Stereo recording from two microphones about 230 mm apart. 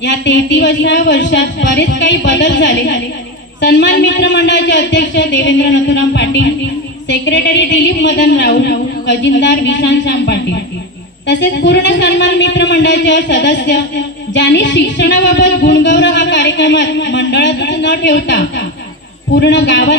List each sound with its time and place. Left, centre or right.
0.0 s a man's voice: left